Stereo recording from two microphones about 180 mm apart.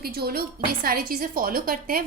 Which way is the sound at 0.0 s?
60° right (ahead or behind).